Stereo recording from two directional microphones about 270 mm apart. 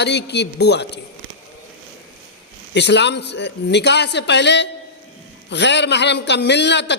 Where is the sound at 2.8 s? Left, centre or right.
Left.